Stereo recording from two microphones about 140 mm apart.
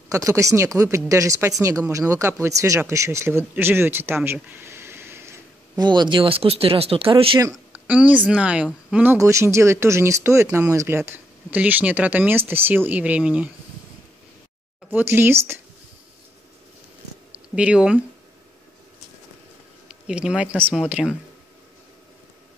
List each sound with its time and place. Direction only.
0.1 s speech: 20° right (ahead or behind)
5.8 s speech: 35° right (ahead or behind)
7.7 s a woman's voice: 10° right (ahead or behind)
14.9 s speech: 15° right (ahead or behind)
17.6 s speech: 10° right (ahead or behind)
19.9 s speech: 5° right (ahead or behind)